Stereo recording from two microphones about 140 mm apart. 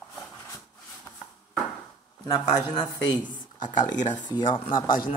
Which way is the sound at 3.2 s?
70° left (ahead or behind).